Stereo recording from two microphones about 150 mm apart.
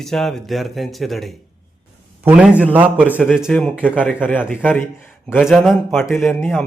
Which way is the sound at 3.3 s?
Centre (ahead or behind).